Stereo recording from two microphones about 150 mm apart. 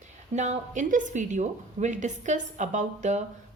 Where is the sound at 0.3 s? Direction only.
50° right (ahead or behind).